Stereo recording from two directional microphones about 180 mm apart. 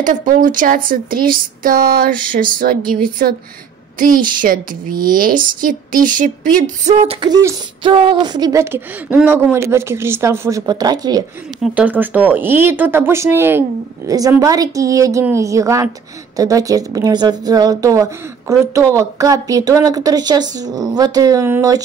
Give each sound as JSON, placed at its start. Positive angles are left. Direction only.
{"t": 0.0, "sound": "speech", "side_deg": -45}
{"t": 7.2, "sound": "speech", "side_deg": -25}
{"t": 11.6, "sound": "a woman's voice", "side_deg": -5}